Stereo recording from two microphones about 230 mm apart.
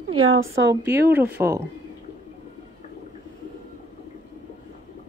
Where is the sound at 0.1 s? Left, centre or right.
Right.